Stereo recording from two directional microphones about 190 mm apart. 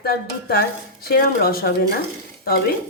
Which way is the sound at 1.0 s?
55° left (ahead or behind).